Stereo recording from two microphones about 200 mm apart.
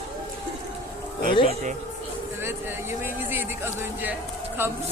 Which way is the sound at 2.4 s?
10° right (ahead or behind).